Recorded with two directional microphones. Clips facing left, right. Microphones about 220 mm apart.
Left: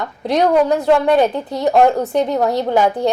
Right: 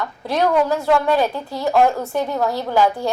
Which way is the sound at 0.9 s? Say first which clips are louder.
Left 4 dB; 20° left (ahead or behind).